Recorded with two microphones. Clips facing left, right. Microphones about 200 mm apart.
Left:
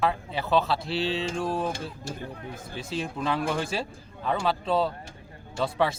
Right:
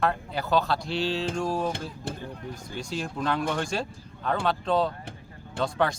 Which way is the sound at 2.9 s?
5° left (ahead or behind).